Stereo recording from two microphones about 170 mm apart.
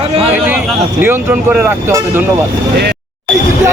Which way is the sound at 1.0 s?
15° right (ahead or behind).